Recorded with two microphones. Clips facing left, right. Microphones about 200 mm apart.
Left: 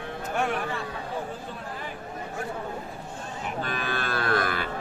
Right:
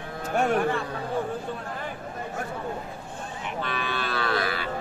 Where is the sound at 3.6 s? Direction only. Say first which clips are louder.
Right 1 dB; 45° left (ahead or behind).